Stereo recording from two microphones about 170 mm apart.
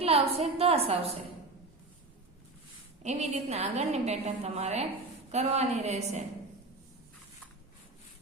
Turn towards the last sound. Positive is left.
turn(degrees=-40)  # may be behind; listen again after turning